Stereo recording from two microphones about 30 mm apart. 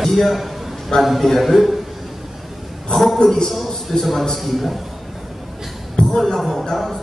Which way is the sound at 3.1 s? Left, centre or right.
Left.